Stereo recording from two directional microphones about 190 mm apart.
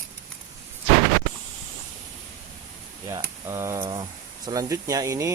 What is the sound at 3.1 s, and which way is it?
Speech, 15° right (ahead or behind).